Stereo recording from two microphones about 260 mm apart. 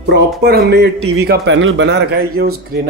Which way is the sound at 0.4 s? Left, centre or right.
Right.